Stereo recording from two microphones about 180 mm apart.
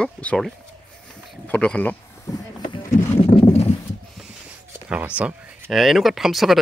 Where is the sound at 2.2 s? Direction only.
25° left (ahead or behind).